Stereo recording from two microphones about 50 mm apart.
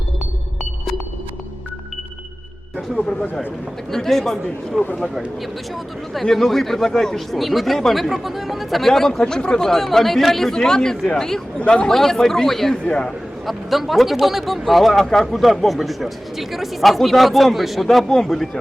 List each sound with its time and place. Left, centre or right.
3.9 s speech: centre
6.2 s a man's voice: centre
11.9 s speech: centre
12.7 s a man's voice: centre
13.5 s speech: centre